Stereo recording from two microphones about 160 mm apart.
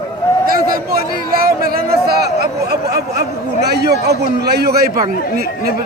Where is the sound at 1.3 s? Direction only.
65° right (ahead or behind).